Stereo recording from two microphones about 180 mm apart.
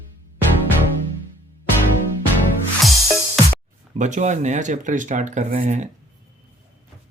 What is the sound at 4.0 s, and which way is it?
Speech, 40° right (ahead or behind).